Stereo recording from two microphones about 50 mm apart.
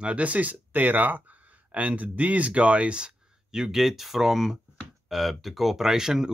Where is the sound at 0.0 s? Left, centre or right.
Right.